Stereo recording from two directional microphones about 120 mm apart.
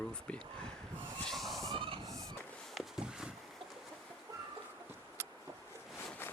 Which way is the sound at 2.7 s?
5° right (ahead or behind).